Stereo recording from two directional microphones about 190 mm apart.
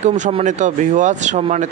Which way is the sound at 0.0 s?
40° right (ahead or behind).